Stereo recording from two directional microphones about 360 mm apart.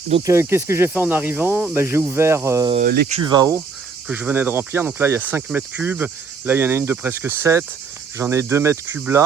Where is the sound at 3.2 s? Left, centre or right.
Centre.